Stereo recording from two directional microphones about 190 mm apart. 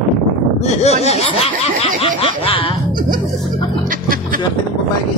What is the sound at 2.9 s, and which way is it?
Speech, 45° right (ahead or behind).